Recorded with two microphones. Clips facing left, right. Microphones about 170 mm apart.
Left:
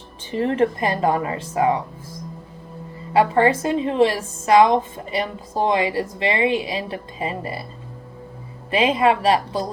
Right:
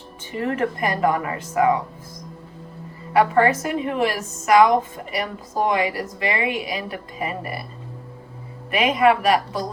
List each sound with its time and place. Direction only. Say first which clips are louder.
0.3 s a woman's voice: left 4 dB; 30° left (ahead or behind)
3.1 s a woman's voice: left 1 dB; 25° left (ahead or behind)
8.7 s a woman's voice: even; 25° left (ahead or behind)